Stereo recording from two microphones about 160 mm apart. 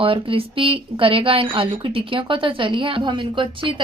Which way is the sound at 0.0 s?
35° right (ahead or behind).